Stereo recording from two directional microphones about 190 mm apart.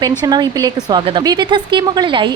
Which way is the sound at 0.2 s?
20° right (ahead or behind).